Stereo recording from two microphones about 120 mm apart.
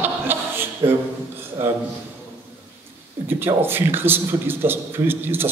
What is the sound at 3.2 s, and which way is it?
A man's voice, 20° right (ahead or behind).